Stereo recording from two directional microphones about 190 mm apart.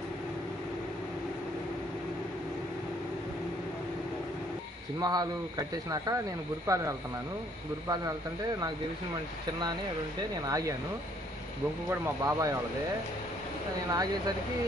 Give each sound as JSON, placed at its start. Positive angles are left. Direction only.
{"t": 5.0, "sound": "speech", "side_deg": -20}
{"t": 10.4, "sound": "speech", "side_deg": -20}
{"t": 11.9, "sound": "speech", "side_deg": -15}
{"t": 13.8, "sound": "speech", "side_deg": -20}